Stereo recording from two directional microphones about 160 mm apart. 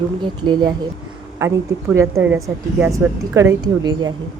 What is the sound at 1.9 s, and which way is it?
A woman's voice, 15° right (ahead or behind).